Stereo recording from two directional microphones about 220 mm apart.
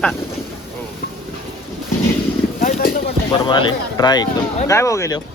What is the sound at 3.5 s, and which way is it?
Speech, 20° left (ahead or behind).